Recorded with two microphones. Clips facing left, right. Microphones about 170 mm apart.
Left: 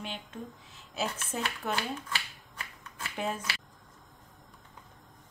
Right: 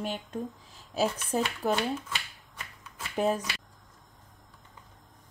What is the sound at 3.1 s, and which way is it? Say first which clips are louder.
Speech: right 7 dB; 40° right (ahead or behind).